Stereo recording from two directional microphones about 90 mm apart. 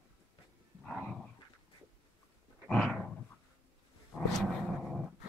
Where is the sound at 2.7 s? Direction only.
5° left (ahead or behind).